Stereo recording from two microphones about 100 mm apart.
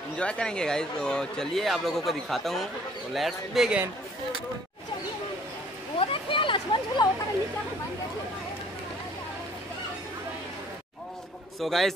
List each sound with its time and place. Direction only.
0.2 s speech: 10° left (ahead or behind)
5.9 s a sound: 60° left (ahead or behind)
11.6 s speech: centre (ahead or behind)